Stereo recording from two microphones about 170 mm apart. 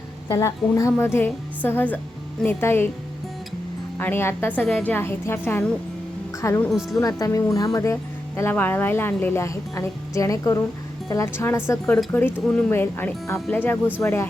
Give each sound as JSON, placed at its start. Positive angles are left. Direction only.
{"t": 0.3, "sound": "a woman's voice", "side_deg": 20}
{"t": 3.9, "sound": "a woman's voice", "side_deg": 15}